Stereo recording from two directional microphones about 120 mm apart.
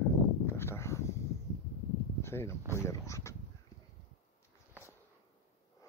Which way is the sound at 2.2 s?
20° left (ahead or behind).